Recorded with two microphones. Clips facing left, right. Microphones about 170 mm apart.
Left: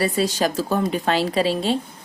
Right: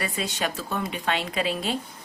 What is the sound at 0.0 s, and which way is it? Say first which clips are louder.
Speech: left 8 dB; 35° left (ahead or behind).